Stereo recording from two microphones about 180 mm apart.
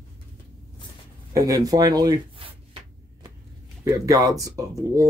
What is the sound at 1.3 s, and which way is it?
Speech, 20° right (ahead or behind).